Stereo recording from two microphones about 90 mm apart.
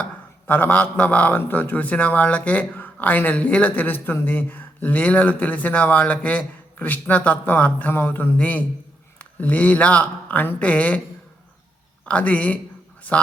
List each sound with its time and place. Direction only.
0.4 s a man's voice: 20° left (ahead or behind)
12.0 s a man's voice: 15° left (ahead or behind)